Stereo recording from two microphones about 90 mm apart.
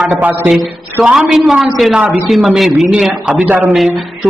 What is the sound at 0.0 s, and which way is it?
Speech, 15° right (ahead or behind).